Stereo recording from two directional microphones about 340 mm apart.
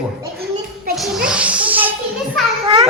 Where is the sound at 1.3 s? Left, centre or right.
Centre.